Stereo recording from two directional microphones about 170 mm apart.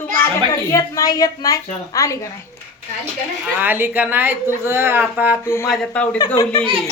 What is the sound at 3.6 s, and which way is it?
Speech, 10° right (ahead or behind).